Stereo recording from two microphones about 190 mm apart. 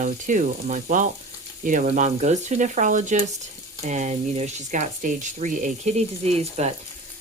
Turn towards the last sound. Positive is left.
turn(degrees=-35)  # may be behind; listen again after turning